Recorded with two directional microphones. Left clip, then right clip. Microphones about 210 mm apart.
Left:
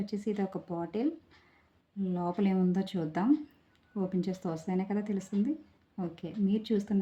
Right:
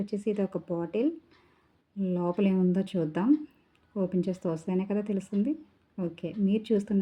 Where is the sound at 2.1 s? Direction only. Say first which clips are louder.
Right 4 dB; 10° right (ahead or behind).